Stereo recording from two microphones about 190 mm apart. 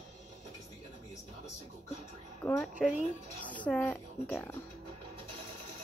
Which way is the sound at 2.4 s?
10° left (ahead or behind).